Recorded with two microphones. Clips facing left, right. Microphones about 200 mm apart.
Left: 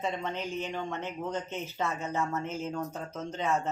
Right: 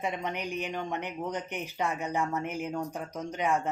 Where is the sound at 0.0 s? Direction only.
15° right (ahead or behind).